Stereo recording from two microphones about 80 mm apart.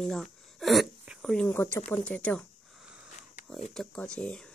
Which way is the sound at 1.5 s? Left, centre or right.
Left.